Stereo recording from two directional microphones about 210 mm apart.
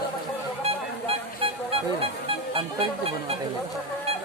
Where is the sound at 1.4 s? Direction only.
25° right (ahead or behind).